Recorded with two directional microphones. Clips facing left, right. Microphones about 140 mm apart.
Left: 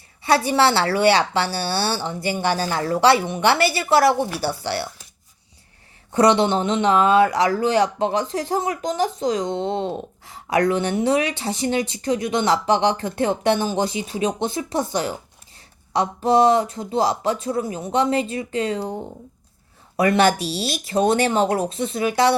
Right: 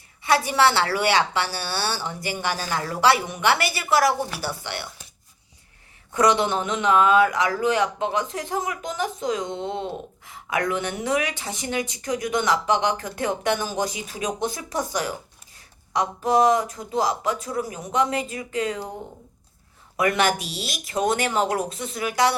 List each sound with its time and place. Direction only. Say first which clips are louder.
0.2 s speech: left 2 dB; 30° left (ahead or behind)
6.1 s speech: left 4 dB; 30° left (ahead or behind)
20.0 s speech: left 5 dB; 30° left (ahead or behind)